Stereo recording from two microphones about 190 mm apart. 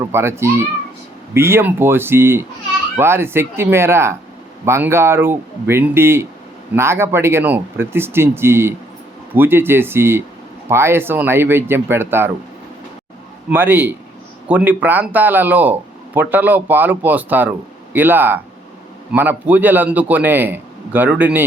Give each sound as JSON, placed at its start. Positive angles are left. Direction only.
{"t": 0.0, "sound": "speech", "side_deg": -15}
{"t": 13.5, "sound": "speech", "side_deg": -10}